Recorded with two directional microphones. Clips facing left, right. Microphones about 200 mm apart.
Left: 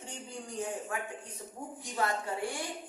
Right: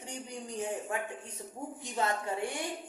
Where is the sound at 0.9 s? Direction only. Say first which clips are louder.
Right 2 dB; 25° right (ahead or behind).